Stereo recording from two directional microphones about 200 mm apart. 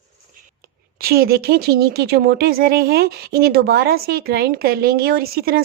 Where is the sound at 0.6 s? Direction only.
50° right (ahead or behind).